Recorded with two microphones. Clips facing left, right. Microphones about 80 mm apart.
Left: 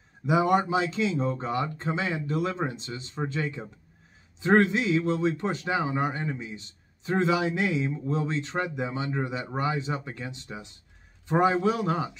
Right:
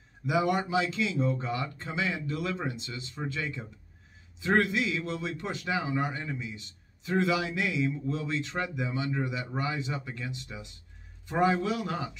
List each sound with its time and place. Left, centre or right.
0.3 s a man's voice: left